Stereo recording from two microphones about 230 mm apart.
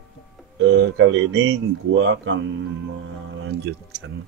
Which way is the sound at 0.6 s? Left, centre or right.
Right.